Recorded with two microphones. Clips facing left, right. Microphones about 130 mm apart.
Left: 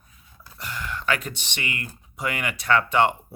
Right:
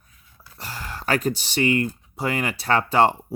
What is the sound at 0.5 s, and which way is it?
Speech, 35° right (ahead or behind).